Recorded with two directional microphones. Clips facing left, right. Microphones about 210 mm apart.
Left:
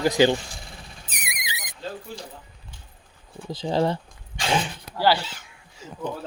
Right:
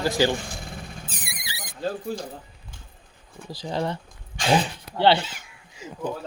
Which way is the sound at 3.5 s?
25° left (ahead or behind).